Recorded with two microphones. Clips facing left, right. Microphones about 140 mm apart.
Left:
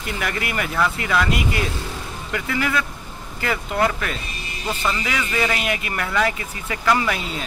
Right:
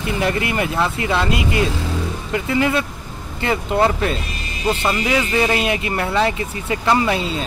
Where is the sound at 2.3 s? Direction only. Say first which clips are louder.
Right 5 dB; 25° right (ahead or behind).